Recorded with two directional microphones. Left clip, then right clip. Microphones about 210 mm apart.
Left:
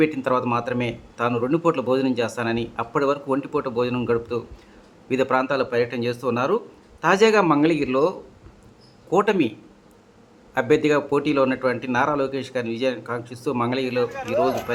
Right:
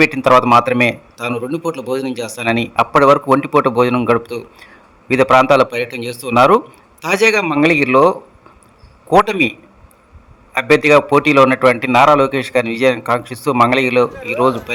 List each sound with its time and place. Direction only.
0.0 s a man's voice: 20° right (ahead or behind)
10.5 s a man's voice: 20° right (ahead or behind)